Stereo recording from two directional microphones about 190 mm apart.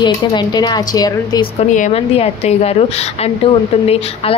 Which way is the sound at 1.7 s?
35° left (ahead or behind).